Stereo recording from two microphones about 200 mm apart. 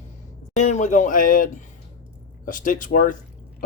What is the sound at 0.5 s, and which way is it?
Speech, 35° left (ahead or behind).